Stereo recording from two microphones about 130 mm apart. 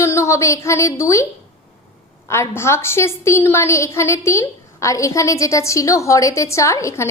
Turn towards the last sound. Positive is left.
turn(degrees=25)  # may be behind; listen again after turning